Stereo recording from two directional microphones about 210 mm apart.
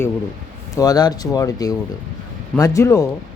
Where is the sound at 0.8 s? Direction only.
20° left (ahead or behind).